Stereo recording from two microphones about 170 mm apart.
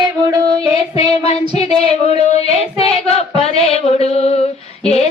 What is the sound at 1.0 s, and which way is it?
Child singing, 35° left (ahead or behind).